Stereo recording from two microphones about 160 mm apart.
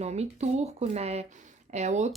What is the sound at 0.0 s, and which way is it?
Speech, 45° right (ahead or behind).